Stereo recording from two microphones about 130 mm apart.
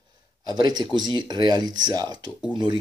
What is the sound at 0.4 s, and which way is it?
A man's voice, 35° right (ahead or behind).